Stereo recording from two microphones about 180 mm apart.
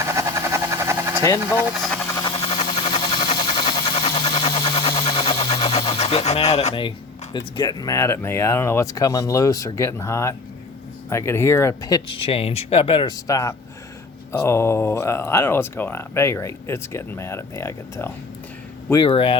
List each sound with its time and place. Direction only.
0.0 s vehicle: 15° right (ahead or behind)
1.4 s speech: 10° right (ahead or behind)
2.0 s a sound: 20° left (ahead or behind)
2.4 s a sound: 35° left (ahead or behind)
7.3 s speech: 25° left (ahead or behind)
19.0 s speech: 30° left (ahead or behind)